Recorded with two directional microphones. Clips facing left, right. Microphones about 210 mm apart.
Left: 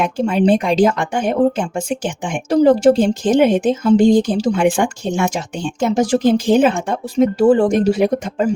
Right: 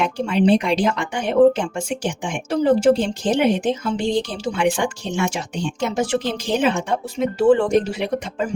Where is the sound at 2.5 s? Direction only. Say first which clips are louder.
Left 5 dB; 40° left (ahead or behind).